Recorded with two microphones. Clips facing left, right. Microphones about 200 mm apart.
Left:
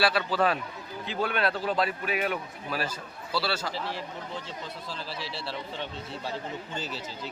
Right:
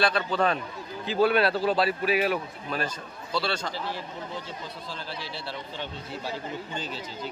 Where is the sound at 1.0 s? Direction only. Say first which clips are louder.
Right 6 dB; 35° right (ahead or behind).